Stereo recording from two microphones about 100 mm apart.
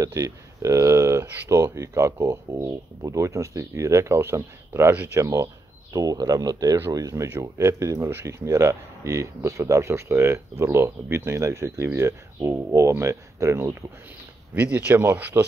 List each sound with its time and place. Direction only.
0.0 s speech: 35° right (ahead or behind)
5.2 s speech: 30° right (ahead or behind)